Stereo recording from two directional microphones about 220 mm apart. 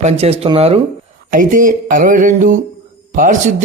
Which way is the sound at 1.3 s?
40° right (ahead or behind).